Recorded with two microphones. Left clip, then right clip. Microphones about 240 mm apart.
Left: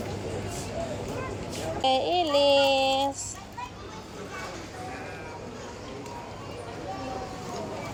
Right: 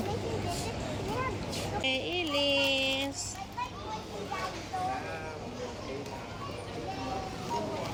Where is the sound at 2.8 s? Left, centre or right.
Centre.